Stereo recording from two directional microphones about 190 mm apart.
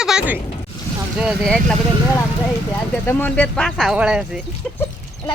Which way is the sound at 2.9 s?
10° left (ahead or behind).